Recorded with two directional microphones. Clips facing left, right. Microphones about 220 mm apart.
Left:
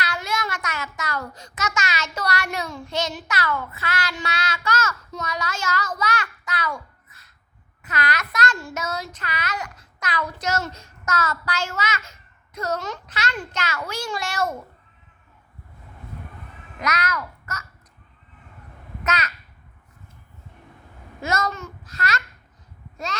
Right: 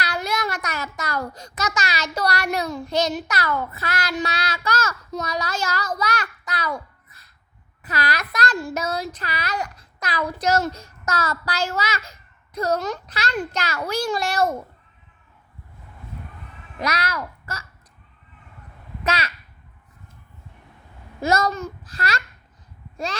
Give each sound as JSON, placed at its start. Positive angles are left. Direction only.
{"t": 0.0, "sound": "a child's voice", "side_deg": -35}
{"t": 7.9, "sound": "a child's voice", "side_deg": -35}
{"t": 16.8, "sound": "a child's voice", "side_deg": -30}
{"t": 19.0, "sound": "a child's voice", "side_deg": -30}
{"t": 21.2, "sound": "a child's voice", "side_deg": -35}